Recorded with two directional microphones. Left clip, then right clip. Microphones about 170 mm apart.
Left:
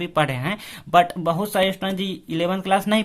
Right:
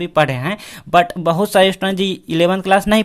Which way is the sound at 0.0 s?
25° right (ahead or behind).